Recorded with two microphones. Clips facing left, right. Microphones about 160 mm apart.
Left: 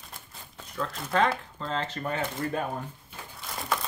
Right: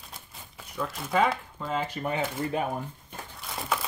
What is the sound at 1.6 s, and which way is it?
Speech, 10° right (ahead or behind).